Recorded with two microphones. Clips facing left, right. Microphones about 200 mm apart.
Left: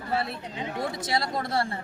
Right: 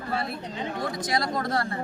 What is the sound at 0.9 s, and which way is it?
Speech, 25° left (ahead or behind).